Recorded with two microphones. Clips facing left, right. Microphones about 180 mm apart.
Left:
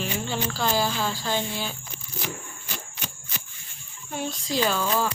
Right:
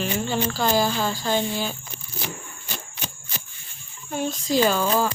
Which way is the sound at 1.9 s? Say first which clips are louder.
Even; 30° right (ahead or behind).